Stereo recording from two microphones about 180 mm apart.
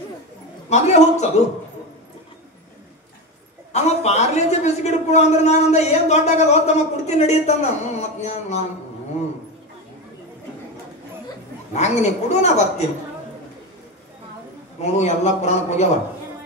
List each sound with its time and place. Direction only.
0.7 s a man's voice: 40° left (ahead or behind)
3.7 s a man's voice: 40° left (ahead or behind)
11.7 s a man's voice: 40° left (ahead or behind)
14.8 s a man's voice: 40° left (ahead or behind)